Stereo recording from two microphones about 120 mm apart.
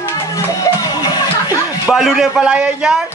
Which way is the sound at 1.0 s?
30° left (ahead or behind).